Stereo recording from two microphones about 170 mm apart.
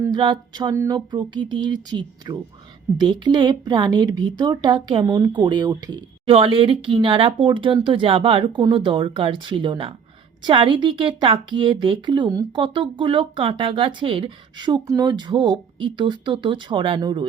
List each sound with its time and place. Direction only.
0.0 s speech: 25° right (ahead or behind)